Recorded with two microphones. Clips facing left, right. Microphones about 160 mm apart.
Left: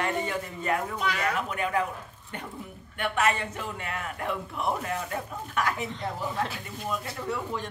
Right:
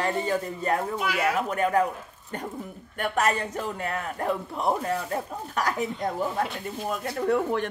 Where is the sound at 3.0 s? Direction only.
40° right (ahead or behind).